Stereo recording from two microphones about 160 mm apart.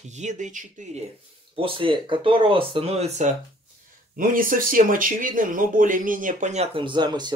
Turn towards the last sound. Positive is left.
turn(degrees=-25)  # may be behind; listen again after turning